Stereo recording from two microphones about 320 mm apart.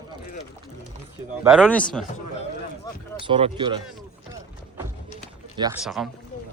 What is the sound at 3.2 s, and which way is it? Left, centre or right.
Speech, centre.